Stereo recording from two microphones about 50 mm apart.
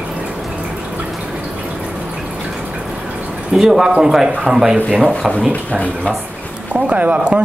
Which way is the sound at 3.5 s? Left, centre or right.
Centre.